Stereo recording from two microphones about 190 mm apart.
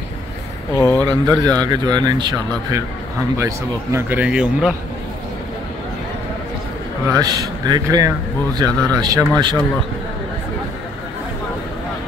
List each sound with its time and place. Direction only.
0.7 s speech: 10° left (ahead or behind)
1.4 s speech: 20° right (ahead or behind); by 4.7 s 5° right (ahead or behind)
7.1 s speech: 20° right (ahead or behind)